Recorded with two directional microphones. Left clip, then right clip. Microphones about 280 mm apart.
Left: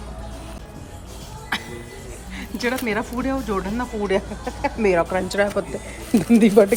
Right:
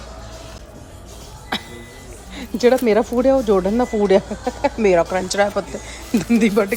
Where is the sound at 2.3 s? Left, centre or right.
Centre.